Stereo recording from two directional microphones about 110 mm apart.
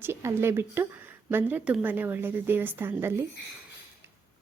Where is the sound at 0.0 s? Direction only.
25° right (ahead or behind).